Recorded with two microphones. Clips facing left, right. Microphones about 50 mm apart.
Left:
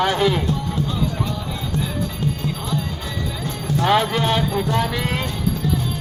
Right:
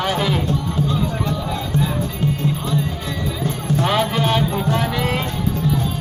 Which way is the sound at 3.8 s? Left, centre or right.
Centre.